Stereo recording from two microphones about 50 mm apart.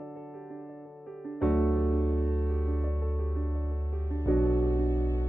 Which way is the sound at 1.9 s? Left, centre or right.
Left.